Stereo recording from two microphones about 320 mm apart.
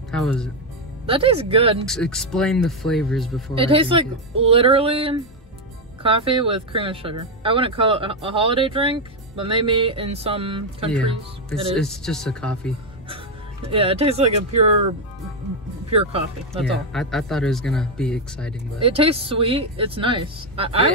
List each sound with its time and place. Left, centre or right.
0.1 s speech: centre
1.0 s speech: centre
1.9 s speech: centre
3.5 s speech: centre
11.8 s speech: centre
13.7 s speech: centre
15.9 s speech: centre
16.9 s speech: centre
18.8 s speech: centre